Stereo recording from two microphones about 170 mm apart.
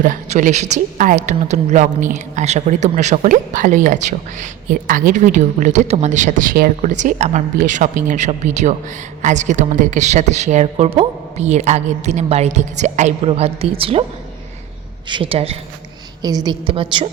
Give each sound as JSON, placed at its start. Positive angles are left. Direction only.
{"t": 0.0, "sound": "a woman's voice", "side_deg": -50}
{"t": 15.0, "sound": "a man's voice", "side_deg": -30}
{"t": 16.2, "sound": "a woman's voice", "side_deg": -25}